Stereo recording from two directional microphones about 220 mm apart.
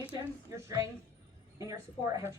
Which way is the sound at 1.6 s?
15° right (ahead or behind).